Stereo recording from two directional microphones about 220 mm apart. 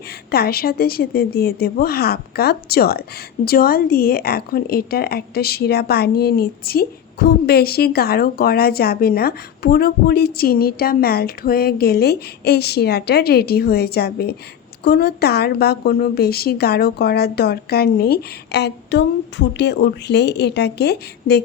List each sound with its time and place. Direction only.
0.3 s a woman's voice: 45° left (ahead or behind)